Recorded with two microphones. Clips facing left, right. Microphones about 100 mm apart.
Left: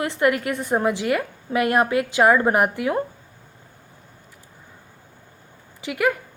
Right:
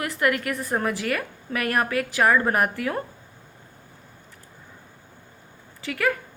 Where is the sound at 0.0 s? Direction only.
25° left (ahead or behind).